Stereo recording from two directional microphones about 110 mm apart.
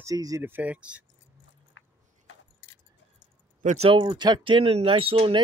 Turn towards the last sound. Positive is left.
turn(degrees=-60)  # may be behind; listen again after turning